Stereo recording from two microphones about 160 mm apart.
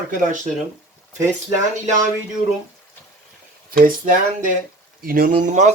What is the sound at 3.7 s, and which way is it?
Speech, 60° right (ahead or behind).